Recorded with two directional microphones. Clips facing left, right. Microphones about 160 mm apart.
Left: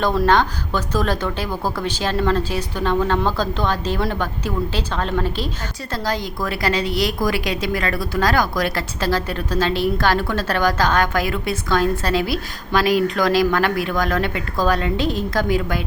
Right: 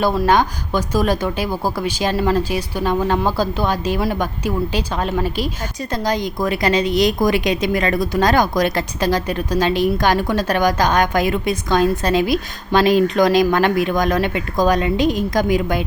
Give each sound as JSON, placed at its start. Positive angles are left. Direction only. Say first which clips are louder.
{"t": 0.0, "sound": "a woman's voice", "louder": "right 1 dB", "side_deg": -10}